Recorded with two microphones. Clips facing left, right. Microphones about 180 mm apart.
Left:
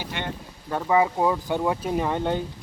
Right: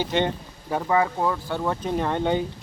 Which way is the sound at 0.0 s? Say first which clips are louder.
Right 9 dB; 25° right (ahead or behind).